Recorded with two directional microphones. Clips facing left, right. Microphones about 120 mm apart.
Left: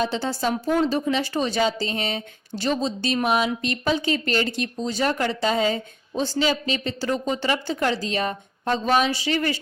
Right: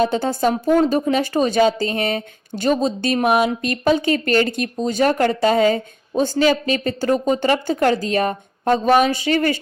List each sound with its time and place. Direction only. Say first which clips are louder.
0.0 s speech: right 6 dB; 50° right (ahead or behind)
7.9 s speech: right 6 dB; 50° right (ahead or behind)